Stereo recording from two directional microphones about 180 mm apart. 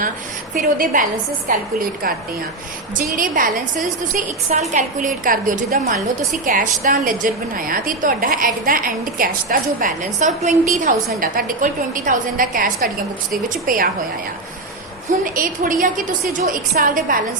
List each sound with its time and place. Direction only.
0.5 s a woman's voice: 50° right (ahead or behind)
3.2 s a woman's voice: 50° right (ahead or behind)
15.2 s a woman's voice: 50° right (ahead or behind)